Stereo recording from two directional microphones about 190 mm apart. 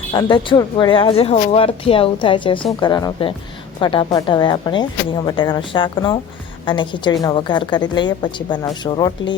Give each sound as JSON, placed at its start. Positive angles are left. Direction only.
{"t": 0.1, "sound": "a woman's voice", "side_deg": 25}